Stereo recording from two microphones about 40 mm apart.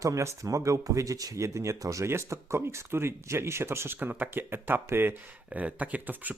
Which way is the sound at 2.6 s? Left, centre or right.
Right.